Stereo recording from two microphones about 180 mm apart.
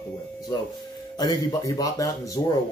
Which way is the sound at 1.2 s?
20° left (ahead or behind).